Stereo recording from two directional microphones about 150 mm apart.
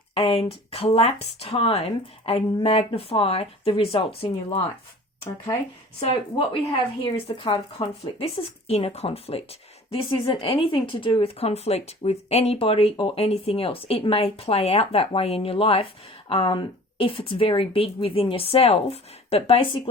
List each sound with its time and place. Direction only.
0.1 s speech: 40° left (ahead or behind)
6.0 s speech: 35° left (ahead or behind)
8.2 s speech: 40° left (ahead or behind)